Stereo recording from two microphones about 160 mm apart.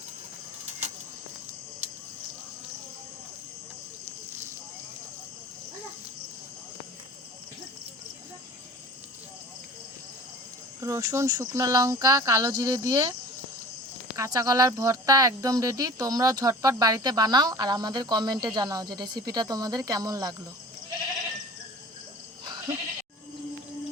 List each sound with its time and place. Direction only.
10.8 s speech: 20° right (ahead or behind)
14.2 s speech: 20° right (ahead or behind)
22.4 s bleat: 25° right (ahead or behind)